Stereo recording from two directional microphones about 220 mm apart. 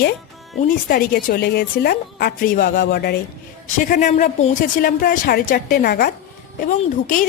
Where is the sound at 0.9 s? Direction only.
40° left (ahead or behind).